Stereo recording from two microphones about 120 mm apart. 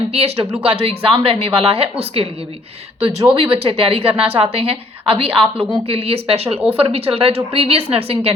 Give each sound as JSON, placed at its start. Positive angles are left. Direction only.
{"t": 0.1, "sound": "a woman's voice", "side_deg": -55}